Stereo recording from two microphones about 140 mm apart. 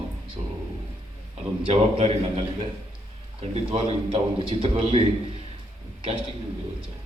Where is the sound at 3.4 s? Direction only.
45° right (ahead or behind).